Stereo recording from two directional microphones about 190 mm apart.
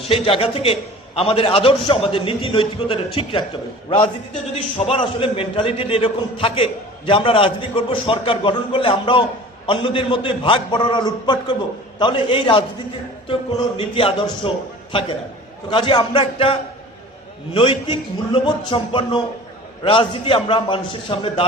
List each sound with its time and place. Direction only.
0.1 s a man's voice: 30° left (ahead or behind)
15.7 s a man's voice: 25° left (ahead or behind)